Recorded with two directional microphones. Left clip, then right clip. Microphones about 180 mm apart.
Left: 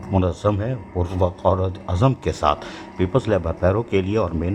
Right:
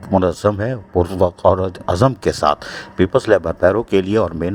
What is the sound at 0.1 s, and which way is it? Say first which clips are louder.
Speech: right 6 dB; 30° right (ahead or behind).